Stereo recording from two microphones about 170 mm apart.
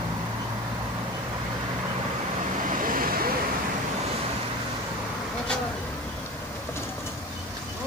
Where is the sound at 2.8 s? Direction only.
55° right (ahead or behind).